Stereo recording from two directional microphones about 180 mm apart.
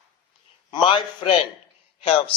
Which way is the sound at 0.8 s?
25° left (ahead or behind).